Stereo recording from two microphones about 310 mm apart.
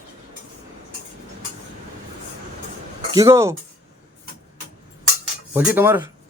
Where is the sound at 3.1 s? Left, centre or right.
Centre.